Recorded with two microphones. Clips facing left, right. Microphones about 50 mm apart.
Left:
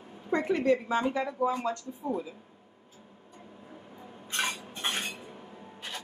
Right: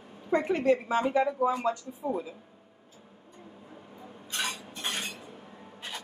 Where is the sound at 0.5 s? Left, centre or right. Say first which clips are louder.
Left 1 dB; right.